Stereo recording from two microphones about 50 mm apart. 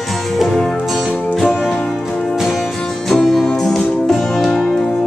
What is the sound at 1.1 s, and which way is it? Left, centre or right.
Music, left.